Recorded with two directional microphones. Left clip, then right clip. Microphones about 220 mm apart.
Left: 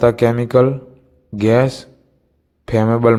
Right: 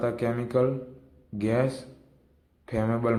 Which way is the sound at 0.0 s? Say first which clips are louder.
Left 14 dB; 40° left (ahead or behind).